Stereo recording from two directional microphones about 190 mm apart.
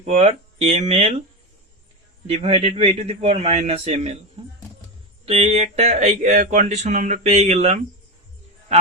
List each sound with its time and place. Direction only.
0.0 s speech: 35° right (ahead or behind)
2.2 s speech: 30° right (ahead or behind)
5.2 s speech: 35° right (ahead or behind)